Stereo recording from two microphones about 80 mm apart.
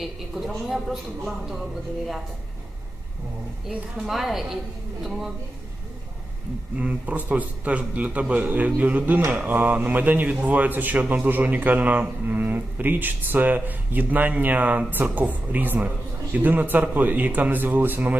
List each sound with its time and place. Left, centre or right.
0.0 s a woman's voice: centre
4.0 s a woman's voice: centre
6.7 s speech: centre